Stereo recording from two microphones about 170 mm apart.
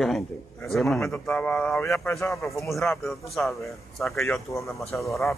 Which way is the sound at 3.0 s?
Centre (ahead or behind).